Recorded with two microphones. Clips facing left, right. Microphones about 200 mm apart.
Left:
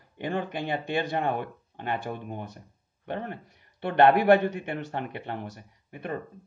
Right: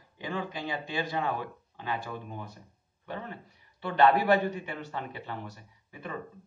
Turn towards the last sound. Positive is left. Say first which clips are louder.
# left 5 dB
turn(degrees=55)  # may be behind; listen again after turning